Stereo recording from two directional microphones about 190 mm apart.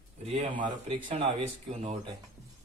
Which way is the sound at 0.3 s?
25° right (ahead or behind).